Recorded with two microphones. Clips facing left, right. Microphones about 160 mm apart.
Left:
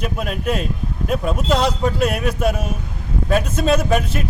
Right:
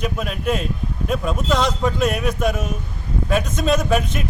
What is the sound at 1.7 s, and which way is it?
A man's voice, 10° left (ahead or behind).